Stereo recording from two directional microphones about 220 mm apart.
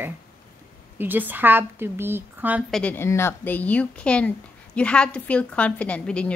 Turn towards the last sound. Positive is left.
turn(degrees=5)  # may be behind; listen again after turning